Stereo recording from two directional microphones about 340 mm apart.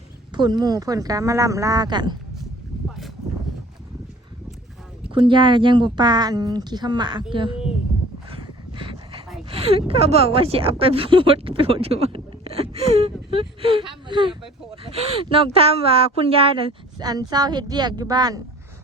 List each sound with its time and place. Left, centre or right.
0.3 s speech: centre
5.1 s speech: centre
8.3 s dog: centre
9.5 s speech: centre